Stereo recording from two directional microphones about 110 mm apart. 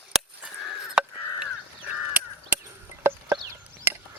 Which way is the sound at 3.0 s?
20° right (ahead or behind).